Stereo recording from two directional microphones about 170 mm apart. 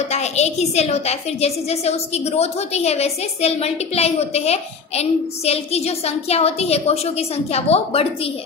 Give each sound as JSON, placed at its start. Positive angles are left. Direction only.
{"t": 0.1, "sound": "a woman's voice", "side_deg": 40}